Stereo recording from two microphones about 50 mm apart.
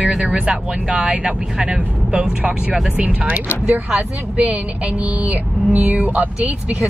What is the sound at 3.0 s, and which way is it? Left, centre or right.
A woman's voice, right.